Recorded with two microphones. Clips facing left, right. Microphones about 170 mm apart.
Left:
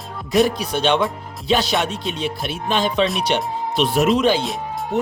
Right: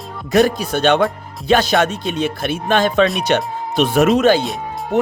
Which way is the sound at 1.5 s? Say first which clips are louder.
Right 5 dB; 50° right (ahead or behind).